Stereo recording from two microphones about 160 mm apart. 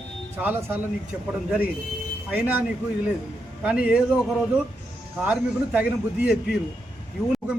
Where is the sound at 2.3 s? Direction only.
10° right (ahead or behind).